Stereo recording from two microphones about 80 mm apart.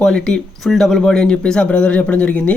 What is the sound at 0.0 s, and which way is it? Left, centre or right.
A man's voice, centre.